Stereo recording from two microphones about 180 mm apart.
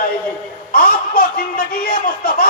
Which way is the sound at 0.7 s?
50° left (ahead or behind).